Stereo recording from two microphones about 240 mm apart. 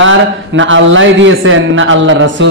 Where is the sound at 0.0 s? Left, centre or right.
Right.